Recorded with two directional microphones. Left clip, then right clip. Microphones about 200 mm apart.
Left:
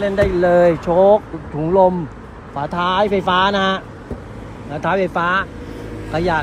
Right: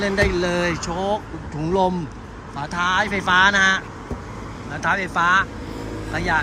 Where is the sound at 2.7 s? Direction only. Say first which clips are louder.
Left 3 dB; 25° right (ahead or behind).